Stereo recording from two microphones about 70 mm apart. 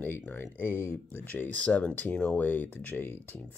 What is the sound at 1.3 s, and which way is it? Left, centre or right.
Speech, left.